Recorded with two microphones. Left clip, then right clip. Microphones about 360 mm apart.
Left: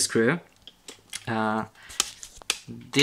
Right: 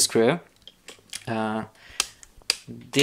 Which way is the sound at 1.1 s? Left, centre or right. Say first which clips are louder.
Left 1 dB; centre.